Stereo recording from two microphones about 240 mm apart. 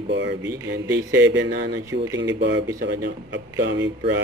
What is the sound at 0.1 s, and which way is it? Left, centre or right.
Speech, right.